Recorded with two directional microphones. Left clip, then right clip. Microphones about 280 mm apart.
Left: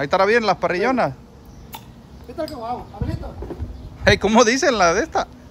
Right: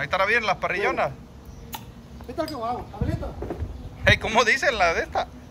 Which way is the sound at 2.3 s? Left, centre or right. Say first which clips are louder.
Left 1 dB; centre.